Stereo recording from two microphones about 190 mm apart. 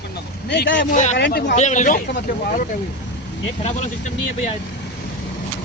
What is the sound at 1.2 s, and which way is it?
Speech, 60° left (ahead or behind).